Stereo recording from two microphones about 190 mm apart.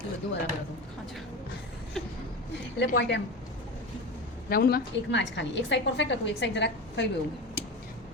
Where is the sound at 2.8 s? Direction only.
65° left (ahead or behind).